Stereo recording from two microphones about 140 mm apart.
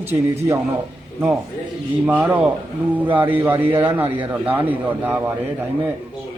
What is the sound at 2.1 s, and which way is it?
A man's voice, 10° right (ahead or behind).